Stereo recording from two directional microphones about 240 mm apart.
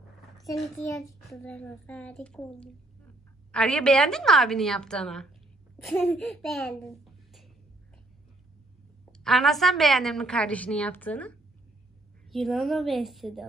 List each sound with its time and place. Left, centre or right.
0.6 s a child's voice: centre
3.5 s a woman's voice: centre
9.2 s a woman's voice: centre